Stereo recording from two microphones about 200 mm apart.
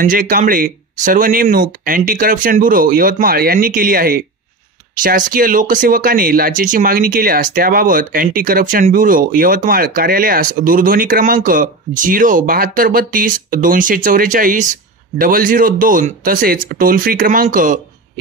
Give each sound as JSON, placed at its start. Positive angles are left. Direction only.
{"t": 0.0, "sound": "speech", "side_deg": -45}